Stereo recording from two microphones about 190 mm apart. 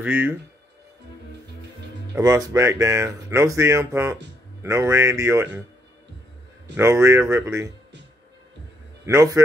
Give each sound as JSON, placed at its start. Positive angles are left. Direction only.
{"t": 0.0, "sound": "speech", "side_deg": -10}
{"t": 2.1, "sound": "speech", "side_deg": -15}
{"t": 6.8, "sound": "speech", "side_deg": -15}
{"t": 9.0, "sound": "speech", "side_deg": -15}